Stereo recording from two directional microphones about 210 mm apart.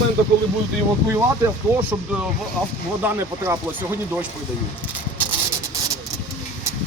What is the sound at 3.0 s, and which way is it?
Speech, 10° right (ahead or behind).